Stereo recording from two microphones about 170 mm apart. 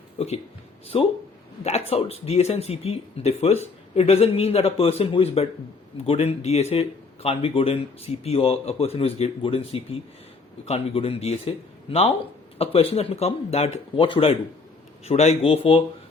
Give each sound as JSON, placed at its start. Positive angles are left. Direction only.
{"t": 0.9, "sound": "speech", "side_deg": 35}